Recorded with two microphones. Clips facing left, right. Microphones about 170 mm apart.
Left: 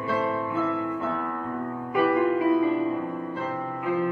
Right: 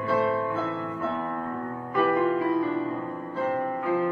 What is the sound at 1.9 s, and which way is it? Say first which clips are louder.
Music: left 1 dB; 15° left (ahead or behind).